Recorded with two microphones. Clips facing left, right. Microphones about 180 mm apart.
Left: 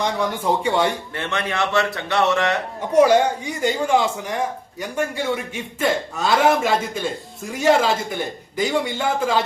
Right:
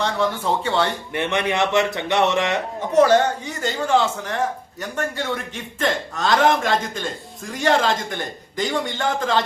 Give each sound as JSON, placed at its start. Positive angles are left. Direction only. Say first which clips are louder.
{"t": 0.0, "sound": "speech", "louder": "even", "side_deg": 15}
{"t": 1.1, "sound": "a man's voice", "louder": "right 3 dB", "side_deg": -20}
{"t": 2.9, "sound": "speech", "louder": "left 1 dB", "side_deg": 10}